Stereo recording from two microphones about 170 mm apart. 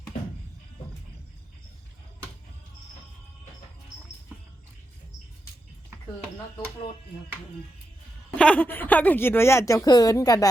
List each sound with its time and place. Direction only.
8.4 s a woman's voice: 10° left (ahead or behind)